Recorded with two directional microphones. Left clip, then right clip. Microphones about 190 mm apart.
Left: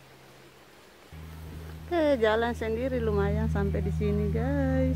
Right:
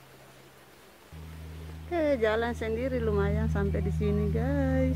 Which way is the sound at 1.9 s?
15° left (ahead or behind).